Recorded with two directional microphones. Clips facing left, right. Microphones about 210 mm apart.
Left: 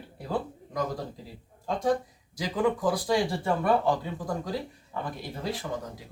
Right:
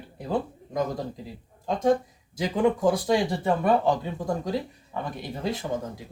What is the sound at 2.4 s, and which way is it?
Speech, 25° right (ahead or behind).